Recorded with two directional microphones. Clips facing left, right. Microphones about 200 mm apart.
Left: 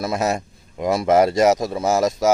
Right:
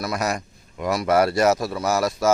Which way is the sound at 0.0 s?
25° left (ahead or behind).